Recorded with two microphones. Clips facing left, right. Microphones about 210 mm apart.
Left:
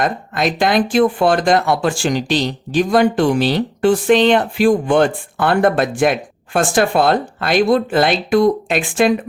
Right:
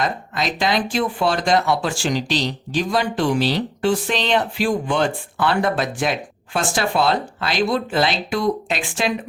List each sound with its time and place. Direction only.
0.0 s speech: 55° left (ahead or behind)